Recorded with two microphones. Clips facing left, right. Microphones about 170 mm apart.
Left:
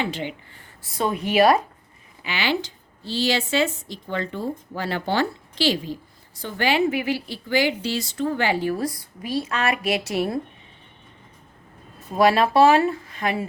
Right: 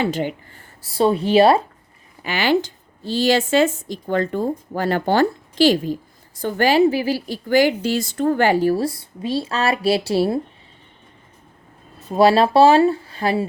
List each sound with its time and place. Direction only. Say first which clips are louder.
0.0 s speech: right 6 dB; 45° right (ahead or behind); by 1.6 s 30° right (ahead or behind)
2.2 s a woman's voice: right 6 dB; 45° right (ahead or behind); by 10.4 s 30° right (ahead or behind)
12.1 s speech: right 4 dB; 30° right (ahead or behind)